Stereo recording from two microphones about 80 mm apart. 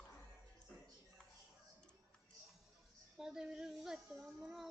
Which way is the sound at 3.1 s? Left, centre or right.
Centre.